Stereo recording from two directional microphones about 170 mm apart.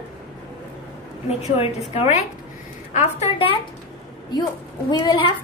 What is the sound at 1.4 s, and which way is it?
A woman's voice, 40° left (ahead or behind).